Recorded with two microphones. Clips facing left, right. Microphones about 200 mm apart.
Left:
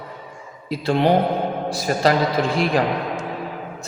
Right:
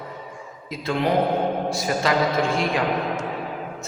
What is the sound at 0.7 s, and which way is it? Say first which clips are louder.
A man's voice: left 5 dB; 35° left (ahead or behind).